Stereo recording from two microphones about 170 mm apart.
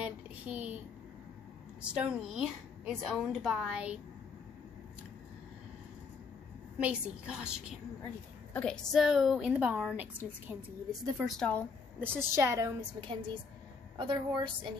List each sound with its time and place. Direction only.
0.0 s a woman's voice: 10° right (ahead or behind)
1.8 s a woman's voice: 5° right (ahead or behind)
6.8 s a woman's voice: 5° right (ahead or behind)
11.0 s a woman's voice: centre (ahead or behind)
12.0 s a woman's voice: 15° right (ahead or behind)